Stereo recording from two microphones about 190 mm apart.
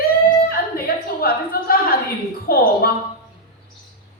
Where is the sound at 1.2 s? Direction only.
50° left (ahead or behind).